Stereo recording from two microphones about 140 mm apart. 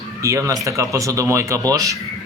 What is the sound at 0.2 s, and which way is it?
Speech, 20° right (ahead or behind).